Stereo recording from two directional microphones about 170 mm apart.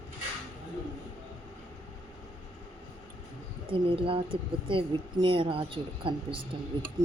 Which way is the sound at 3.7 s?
30° right (ahead or behind).